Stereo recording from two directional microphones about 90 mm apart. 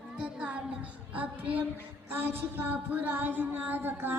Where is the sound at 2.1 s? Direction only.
25° right (ahead or behind).